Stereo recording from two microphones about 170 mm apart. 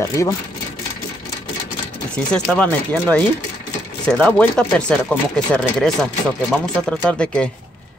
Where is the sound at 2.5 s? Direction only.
10° left (ahead or behind).